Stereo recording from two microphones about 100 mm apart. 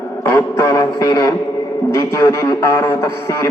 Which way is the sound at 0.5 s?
35° left (ahead or behind).